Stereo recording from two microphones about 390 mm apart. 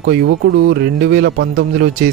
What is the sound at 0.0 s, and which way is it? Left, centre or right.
Speech, right.